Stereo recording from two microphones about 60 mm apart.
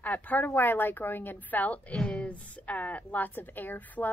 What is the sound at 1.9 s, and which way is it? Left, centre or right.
A woman's voice, centre.